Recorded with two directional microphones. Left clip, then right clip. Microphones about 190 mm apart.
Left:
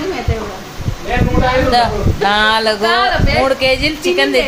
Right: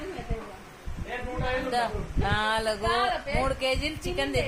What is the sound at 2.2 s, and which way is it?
A woman's voice, 15° right (ahead or behind).